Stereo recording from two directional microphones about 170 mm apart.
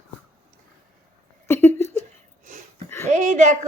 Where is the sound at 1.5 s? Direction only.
15° left (ahead or behind).